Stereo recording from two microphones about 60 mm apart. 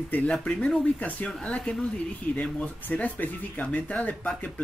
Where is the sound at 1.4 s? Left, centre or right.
Centre.